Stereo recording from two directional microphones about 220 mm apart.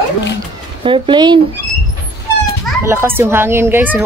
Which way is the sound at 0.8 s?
25° right (ahead or behind).